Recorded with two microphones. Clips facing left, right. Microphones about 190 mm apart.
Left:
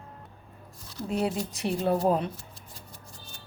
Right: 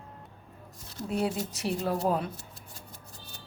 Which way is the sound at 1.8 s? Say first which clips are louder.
Left 4 dB; 30° left (ahead or behind).